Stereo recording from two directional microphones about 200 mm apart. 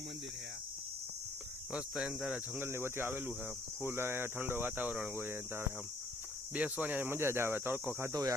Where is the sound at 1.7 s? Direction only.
5° right (ahead or behind).